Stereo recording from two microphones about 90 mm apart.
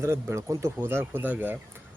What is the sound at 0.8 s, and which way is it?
Speech, 25° right (ahead or behind).